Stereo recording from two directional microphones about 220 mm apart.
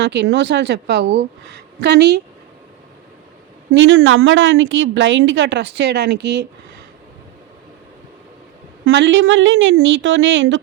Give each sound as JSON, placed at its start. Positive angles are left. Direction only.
{"t": 0.0, "sound": "a woman's voice", "side_deg": -55}
{"t": 3.7, "sound": "a woman's voice", "side_deg": -65}
{"t": 8.8, "sound": "a woman's voice", "side_deg": -55}